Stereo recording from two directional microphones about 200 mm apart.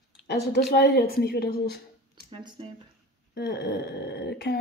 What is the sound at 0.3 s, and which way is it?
Speech, 50° left (ahead or behind).